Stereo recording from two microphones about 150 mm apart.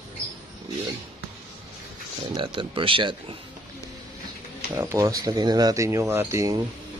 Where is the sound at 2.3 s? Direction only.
35° right (ahead or behind).